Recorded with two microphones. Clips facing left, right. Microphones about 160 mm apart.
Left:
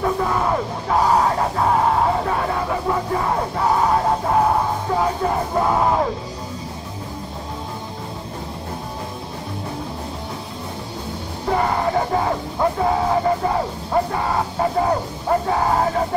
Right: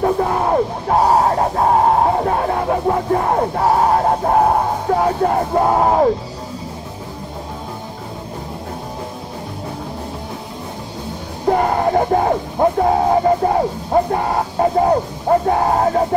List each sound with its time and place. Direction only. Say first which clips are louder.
0.0 s music: right 4 dB; 45° right (ahead or behind)
11.4 s music: right 4 dB; 45° right (ahead or behind)